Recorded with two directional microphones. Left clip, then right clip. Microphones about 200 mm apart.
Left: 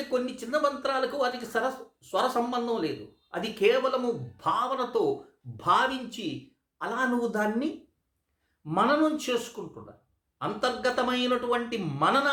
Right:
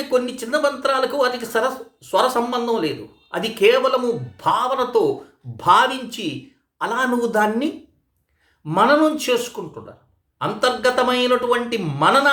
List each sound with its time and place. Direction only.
0.1 s speech: 10° right (ahead or behind)